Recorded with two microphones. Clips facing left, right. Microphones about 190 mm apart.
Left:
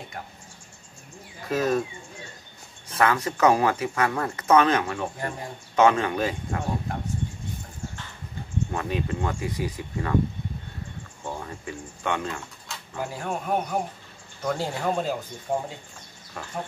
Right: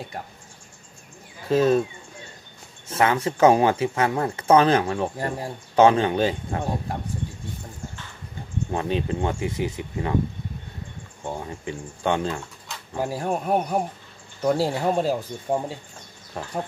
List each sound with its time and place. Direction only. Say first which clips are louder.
1.5 s speech: right 5 dB; 30° right (ahead or behind)
2.9 s speech: right 2 dB; 25° right (ahead or behind)
8.7 s speech: right 5 dB; 30° right (ahead or behind)
11.2 s a man's voice: right 3 dB; 20° right (ahead or behind)